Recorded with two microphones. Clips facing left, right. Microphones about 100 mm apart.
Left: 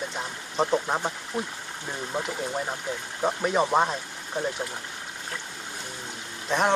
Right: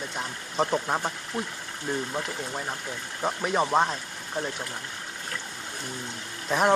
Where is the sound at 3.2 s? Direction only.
5° left (ahead or behind).